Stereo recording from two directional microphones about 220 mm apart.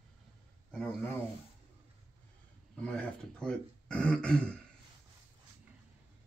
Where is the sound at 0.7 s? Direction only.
5° left (ahead or behind).